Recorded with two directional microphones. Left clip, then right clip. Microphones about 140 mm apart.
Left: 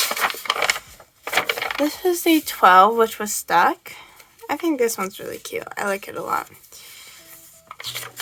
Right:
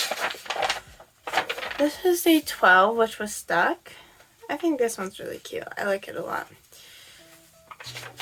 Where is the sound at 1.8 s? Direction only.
30° left (ahead or behind).